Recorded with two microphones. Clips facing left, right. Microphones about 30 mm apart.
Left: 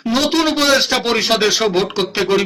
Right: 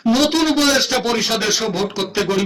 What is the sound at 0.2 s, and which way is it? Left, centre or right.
Speech, centre.